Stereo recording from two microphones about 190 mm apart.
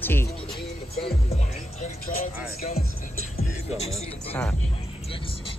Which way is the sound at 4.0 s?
30° left (ahead or behind).